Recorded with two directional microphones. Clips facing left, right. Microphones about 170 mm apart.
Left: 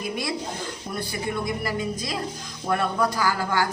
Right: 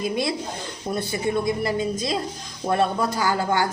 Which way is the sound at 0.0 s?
25° right (ahead or behind).